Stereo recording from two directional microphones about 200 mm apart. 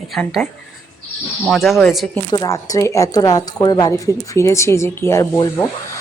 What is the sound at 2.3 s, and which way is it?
Speech, 20° left (ahead or behind).